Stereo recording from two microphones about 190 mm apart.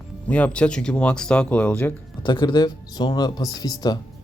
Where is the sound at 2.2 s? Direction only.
25° left (ahead or behind).